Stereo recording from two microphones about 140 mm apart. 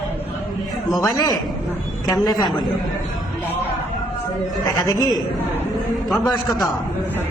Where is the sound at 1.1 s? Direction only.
25° left (ahead or behind).